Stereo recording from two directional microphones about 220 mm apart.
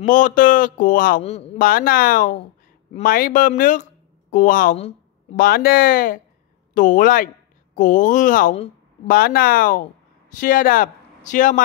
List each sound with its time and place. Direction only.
0.0 s speech: 35° left (ahead or behind)
1.6 s speech: 40° left (ahead or behind)
5.3 s a woman's voice: 40° left (ahead or behind)
9.1 s speech: 40° left (ahead or behind)